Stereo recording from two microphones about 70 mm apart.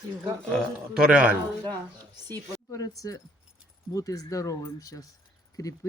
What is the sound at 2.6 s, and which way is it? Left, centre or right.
Speech, left.